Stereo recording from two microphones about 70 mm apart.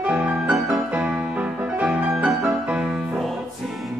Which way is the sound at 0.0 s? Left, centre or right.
Centre.